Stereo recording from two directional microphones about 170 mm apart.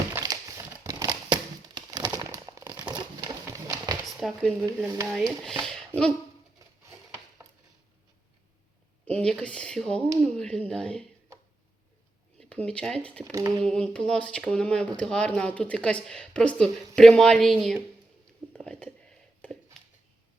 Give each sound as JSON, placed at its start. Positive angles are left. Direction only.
{"t": 0.1, "sound": "crumpling", "side_deg": -20}
{"t": 4.0, "sound": "a sound", "side_deg": 0}
{"t": 5.0, "sound": "speech", "side_deg": 5}
{"t": 9.0, "sound": "speech", "side_deg": 5}
{"t": 12.4, "sound": "speech", "side_deg": 5}
{"t": 18.5, "sound": "a sound", "side_deg": 5}